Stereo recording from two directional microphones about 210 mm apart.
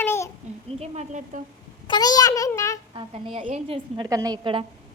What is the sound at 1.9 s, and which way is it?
Speech, 20° left (ahead or behind).